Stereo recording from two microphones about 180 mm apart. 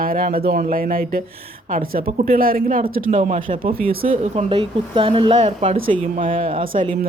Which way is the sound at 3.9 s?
55° right (ahead or behind).